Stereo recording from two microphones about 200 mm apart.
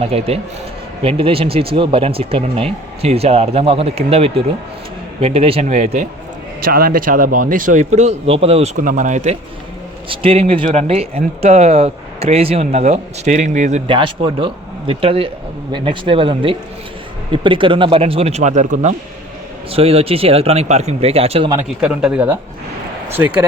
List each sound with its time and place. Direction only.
0.0 s speech: 30° right (ahead or behind)
6.6 s speech: 45° right (ahead or behind)
13.9 s speech: 25° right (ahead or behind)
21.8 s speech: 5° right (ahead or behind)